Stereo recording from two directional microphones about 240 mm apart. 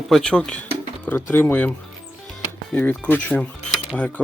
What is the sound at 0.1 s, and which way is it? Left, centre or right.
Speech, centre.